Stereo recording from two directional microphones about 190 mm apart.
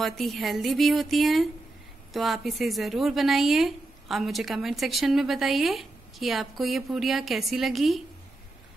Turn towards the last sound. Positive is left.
turn(degrees=0)  # may be behind; listen again after turning